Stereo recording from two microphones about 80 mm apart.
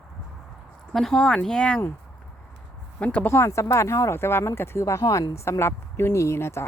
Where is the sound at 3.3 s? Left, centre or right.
Left.